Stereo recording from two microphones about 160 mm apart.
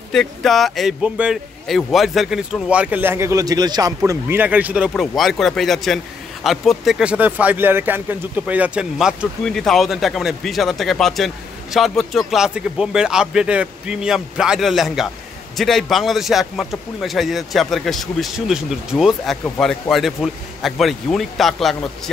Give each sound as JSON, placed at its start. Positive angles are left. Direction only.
{"t": 0.1, "sound": "speech", "side_deg": 0}